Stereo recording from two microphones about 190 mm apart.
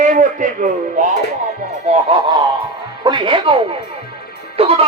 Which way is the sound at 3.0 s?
25° right (ahead or behind).